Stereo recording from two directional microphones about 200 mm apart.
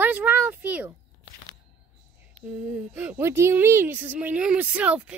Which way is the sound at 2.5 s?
5° right (ahead or behind).